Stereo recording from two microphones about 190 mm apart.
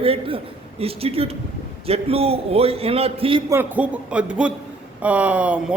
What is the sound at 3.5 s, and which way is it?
A man's voice, 10° right (ahead or behind).